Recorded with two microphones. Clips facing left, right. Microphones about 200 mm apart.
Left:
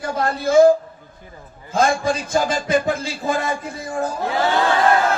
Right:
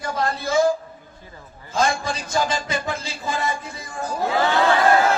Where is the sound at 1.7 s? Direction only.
55° left (ahead or behind).